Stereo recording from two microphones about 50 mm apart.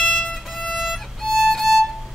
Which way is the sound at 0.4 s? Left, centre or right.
Centre.